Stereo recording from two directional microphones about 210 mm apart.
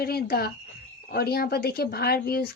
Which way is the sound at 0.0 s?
50° left (ahead or behind).